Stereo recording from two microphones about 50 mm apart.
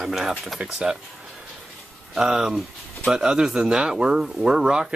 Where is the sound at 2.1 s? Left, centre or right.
Centre.